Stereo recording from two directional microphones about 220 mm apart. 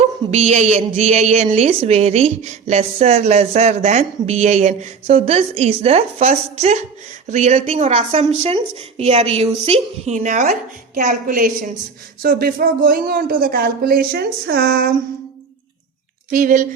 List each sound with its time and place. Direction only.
0.3 s a woman's voice: 30° right (ahead or behind)
16.3 s a woman's voice: 35° right (ahead or behind)